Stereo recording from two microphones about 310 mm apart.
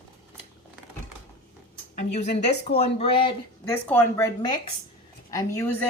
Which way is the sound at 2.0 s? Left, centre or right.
Left.